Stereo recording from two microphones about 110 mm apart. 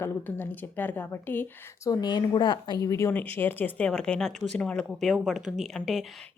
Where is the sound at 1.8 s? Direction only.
35° left (ahead or behind).